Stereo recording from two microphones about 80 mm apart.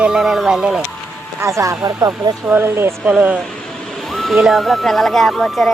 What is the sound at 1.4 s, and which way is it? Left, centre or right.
Speech, right.